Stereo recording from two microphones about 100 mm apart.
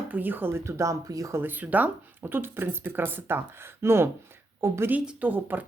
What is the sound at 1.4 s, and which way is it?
Speech, 20° right (ahead or behind).